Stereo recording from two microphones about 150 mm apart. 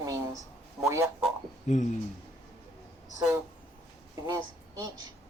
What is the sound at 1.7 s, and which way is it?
Speech, 55° left (ahead or behind).